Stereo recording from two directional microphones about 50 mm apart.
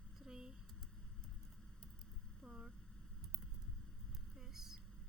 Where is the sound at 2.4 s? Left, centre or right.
Centre.